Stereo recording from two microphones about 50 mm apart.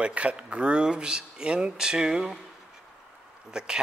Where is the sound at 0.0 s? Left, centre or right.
Right.